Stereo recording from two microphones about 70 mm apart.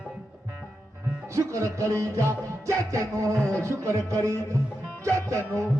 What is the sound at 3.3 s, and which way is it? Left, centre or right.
Speech, centre.